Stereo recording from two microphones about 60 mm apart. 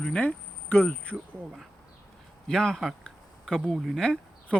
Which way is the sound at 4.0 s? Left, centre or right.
Centre.